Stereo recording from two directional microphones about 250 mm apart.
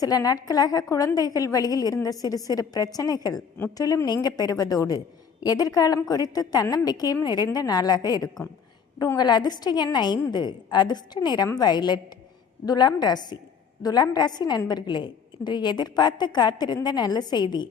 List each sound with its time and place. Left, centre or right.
0.0 s a woman's voice: centre